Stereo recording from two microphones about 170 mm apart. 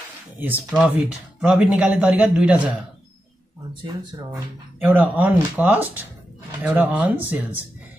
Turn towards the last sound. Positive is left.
turn(degrees=-10)  # may be behind; listen again after turning